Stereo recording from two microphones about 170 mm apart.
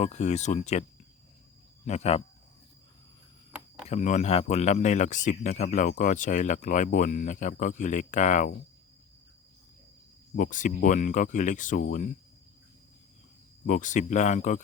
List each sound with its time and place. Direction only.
0.0 s speech: 40° left (ahead or behind)
3.8 s speech: 40° left (ahead or behind)
10.3 s speech: 50° left (ahead or behind)
13.7 s speech: 45° left (ahead or behind)